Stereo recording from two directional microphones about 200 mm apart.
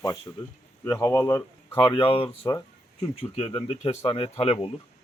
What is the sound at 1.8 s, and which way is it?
Speech, 25° left (ahead or behind).